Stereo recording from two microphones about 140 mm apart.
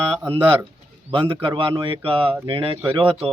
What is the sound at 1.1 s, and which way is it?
Speech, 40° right (ahead or behind).